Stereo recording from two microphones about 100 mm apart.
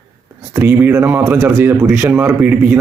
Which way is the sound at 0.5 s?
25° right (ahead or behind).